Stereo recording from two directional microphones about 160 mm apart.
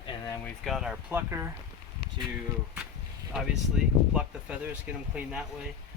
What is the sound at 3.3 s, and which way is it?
Speech, 5° right (ahead or behind).